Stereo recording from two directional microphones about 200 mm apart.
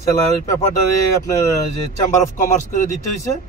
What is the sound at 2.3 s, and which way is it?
Speech, 40° left (ahead or behind).